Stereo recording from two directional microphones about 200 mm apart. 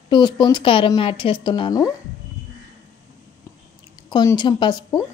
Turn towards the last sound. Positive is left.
turn(degrees=20)  # may be behind; listen again after turning